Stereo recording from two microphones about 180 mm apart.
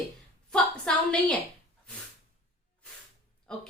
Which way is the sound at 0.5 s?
5° left (ahead or behind).